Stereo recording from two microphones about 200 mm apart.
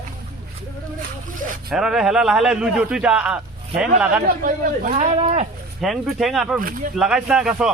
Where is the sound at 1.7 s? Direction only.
Centre (ahead or behind).